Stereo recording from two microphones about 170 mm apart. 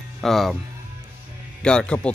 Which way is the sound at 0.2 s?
Centre (ahead or behind).